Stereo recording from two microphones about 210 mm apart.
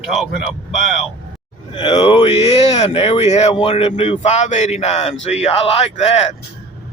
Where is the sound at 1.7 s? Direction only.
20° left (ahead or behind).